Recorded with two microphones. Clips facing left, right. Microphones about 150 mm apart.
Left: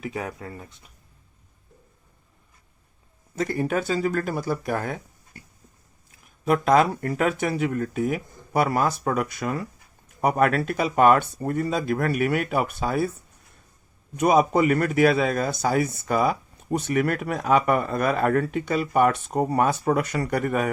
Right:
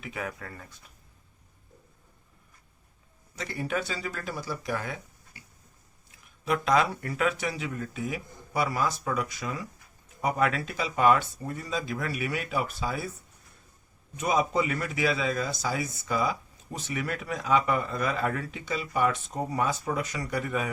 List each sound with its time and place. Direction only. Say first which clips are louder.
0.0 s speech: left 5 dB; 35° left (ahead or behind)
3.3 s speech: left 7 dB; 50° left (ahead or behind)
6.4 s a man's voice: left 6 dB; 50° left (ahead or behind)
14.2 s a man's voice: left 7 dB; 60° left (ahead or behind)